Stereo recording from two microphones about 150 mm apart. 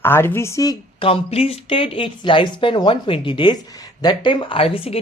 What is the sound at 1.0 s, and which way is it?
Speech, 40° left (ahead or behind).